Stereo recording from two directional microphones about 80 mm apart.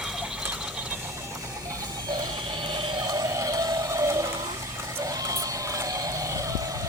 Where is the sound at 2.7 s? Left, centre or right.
Right.